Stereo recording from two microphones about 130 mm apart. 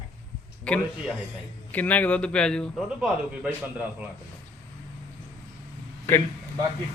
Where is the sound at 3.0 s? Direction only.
10° right (ahead or behind).